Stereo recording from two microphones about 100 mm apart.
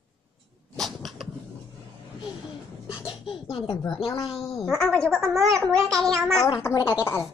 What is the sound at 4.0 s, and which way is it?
Speech, 70° left (ahead or behind).